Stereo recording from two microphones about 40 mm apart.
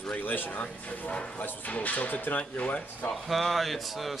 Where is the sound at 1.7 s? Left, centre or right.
Left.